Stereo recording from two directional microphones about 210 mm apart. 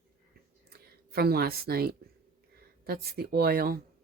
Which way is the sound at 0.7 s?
45° right (ahead or behind).